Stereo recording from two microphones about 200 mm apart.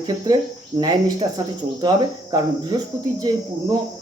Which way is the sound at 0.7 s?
20° right (ahead or behind).